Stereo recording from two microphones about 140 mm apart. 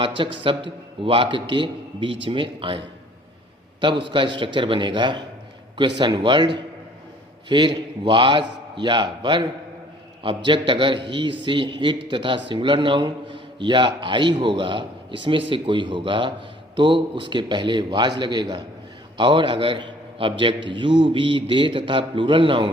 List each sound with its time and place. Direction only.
0.0 s a man's voice: 35° right (ahead or behind)